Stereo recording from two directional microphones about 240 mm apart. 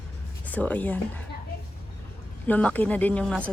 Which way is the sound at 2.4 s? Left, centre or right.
Centre.